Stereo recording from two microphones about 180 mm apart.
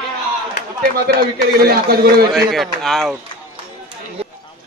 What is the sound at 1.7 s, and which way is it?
Speech, 60° right (ahead or behind).